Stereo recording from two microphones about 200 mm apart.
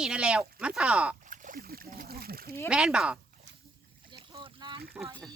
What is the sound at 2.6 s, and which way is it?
Speech, 5° right (ahead or behind).